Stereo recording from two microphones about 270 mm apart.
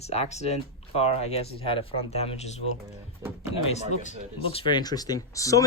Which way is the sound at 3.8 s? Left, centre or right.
Left.